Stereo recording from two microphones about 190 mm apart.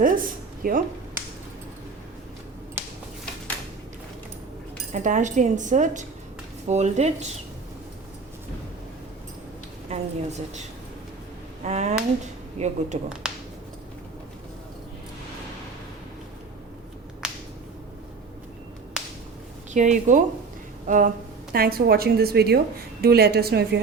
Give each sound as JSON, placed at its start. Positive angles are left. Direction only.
{"t": 0.0, "sound": "a sound", "side_deg": -45}
{"t": 4.9, "sound": "speech", "side_deg": -40}
{"t": 9.9, "sound": "speech", "side_deg": -35}
{"t": 11.6, "sound": "speech", "side_deg": -35}
{"t": 13.2, "sound": "a sound", "side_deg": -5}
{"t": 17.2, "sound": "finger snapping", "side_deg": -5}
{"t": 19.7, "sound": "speech", "side_deg": -40}
{"t": 20.8, "sound": "a sound", "side_deg": -40}
{"t": 21.5, "sound": "a woman's voice", "side_deg": -55}